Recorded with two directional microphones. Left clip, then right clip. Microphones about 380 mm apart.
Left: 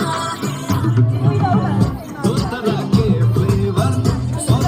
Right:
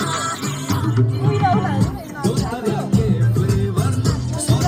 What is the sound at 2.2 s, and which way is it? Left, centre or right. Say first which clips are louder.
Music: left 3 dB; centre.